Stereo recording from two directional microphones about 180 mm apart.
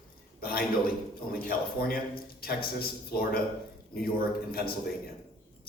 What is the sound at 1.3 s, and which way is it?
A man's voice, 55° left (ahead or behind).